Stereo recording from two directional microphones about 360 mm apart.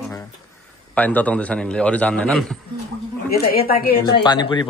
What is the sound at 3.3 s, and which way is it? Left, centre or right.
Speech, left.